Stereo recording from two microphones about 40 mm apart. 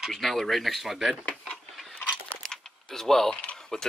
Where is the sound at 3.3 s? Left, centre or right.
Left.